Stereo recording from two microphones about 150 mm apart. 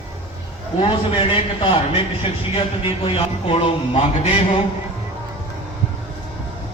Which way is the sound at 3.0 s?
40° left (ahead or behind).